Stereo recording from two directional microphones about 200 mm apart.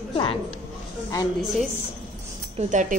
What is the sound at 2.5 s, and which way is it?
Speech, 40° right (ahead or behind).